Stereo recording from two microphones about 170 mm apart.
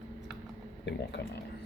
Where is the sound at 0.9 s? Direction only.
90° left.